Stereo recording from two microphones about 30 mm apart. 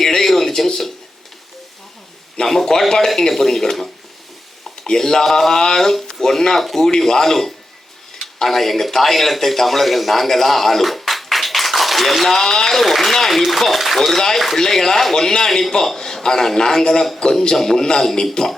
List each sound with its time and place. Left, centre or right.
0.0 s a sound: centre
2.4 s speech: centre
4.9 s speech: centre
6.8 s speech: centre
12.8 s speech: centre
14.2 s speech: centre